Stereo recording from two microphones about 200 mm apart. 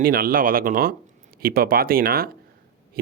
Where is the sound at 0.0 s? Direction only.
45° right (ahead or behind).